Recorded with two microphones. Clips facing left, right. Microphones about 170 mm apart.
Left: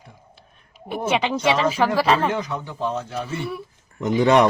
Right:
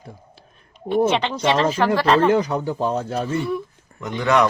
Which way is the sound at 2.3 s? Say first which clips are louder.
Right 7 dB; 35° right (ahead or behind).